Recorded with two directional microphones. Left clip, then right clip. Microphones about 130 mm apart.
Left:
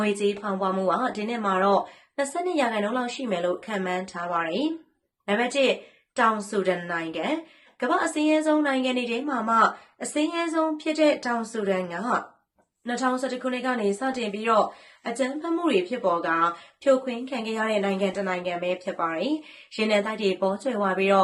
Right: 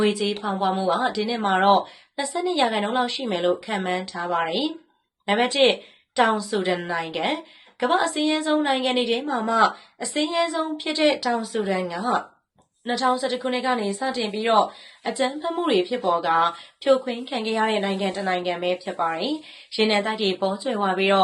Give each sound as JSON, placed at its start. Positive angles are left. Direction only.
{"t": 0.0, "sound": "a woman's voice", "side_deg": -30}
{"t": 13.0, "sound": "a woman's voice", "side_deg": -20}